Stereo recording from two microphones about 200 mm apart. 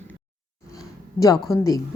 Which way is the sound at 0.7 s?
15° left (ahead or behind).